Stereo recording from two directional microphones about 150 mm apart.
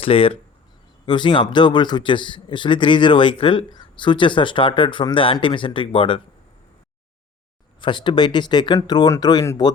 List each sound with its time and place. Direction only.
0.0 s speech: 40° left (ahead or behind)
7.8 s speech: 30° left (ahead or behind)